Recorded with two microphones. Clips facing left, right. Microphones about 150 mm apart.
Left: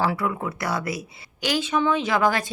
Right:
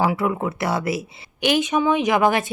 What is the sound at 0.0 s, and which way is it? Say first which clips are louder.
A woman's voice: right 4 dB; 15° right (ahead or behind).